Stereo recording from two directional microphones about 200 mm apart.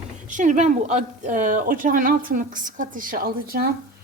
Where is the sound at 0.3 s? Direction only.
40° right (ahead or behind).